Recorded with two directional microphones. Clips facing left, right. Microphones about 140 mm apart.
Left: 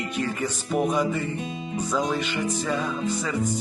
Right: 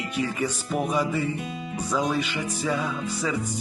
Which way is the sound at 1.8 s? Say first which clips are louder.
Even; 10° right (ahead or behind).